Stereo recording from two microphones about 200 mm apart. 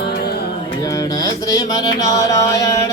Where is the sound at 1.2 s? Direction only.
20° left (ahead or behind).